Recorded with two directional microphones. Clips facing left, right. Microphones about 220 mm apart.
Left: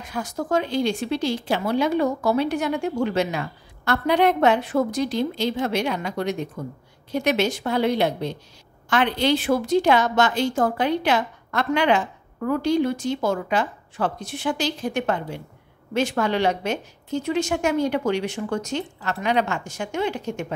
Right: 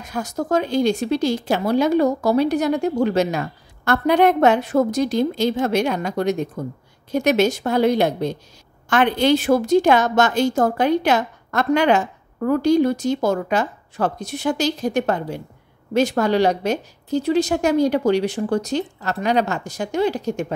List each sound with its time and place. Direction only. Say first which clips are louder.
0.0 s speech: right 3 dB; 40° right (ahead or behind)